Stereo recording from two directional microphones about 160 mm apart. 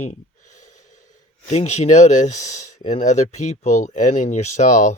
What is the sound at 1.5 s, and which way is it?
Speech, 45° left (ahead or behind).